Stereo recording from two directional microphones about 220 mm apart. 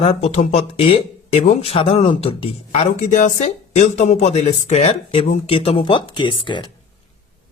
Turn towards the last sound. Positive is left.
turn(degrees=20)  # may be behind; listen again after turning